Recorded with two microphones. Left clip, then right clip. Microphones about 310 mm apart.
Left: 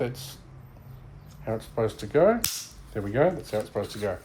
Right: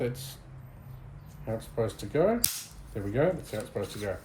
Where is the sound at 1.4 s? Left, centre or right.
Left.